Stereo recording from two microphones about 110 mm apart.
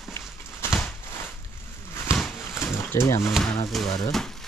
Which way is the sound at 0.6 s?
20° left (ahead or behind).